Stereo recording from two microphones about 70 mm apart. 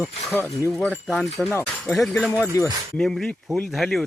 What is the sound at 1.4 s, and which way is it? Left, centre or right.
Speech, left.